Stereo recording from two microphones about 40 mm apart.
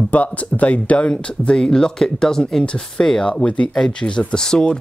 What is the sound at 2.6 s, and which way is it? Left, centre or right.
Speech, left.